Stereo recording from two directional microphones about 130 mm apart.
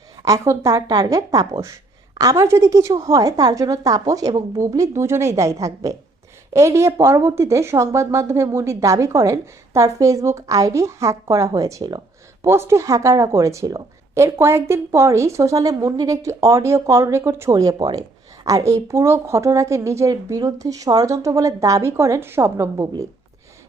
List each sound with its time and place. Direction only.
0.4 s a woman's voice: 25° right (ahead or behind)
12.5 s a woman's voice: 20° right (ahead or behind)